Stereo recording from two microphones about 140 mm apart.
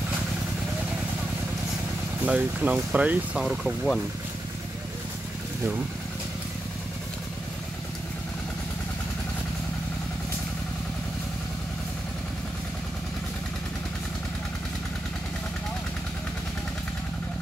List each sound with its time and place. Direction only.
2.2 s speech: 10° right (ahead or behind)